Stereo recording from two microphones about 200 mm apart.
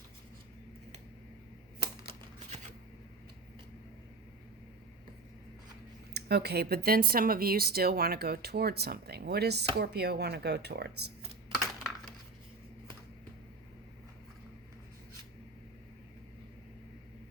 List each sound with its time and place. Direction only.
1.8 s typewriter: 30° right (ahead or behind)
6.1 s speech: 55° right (ahead or behind)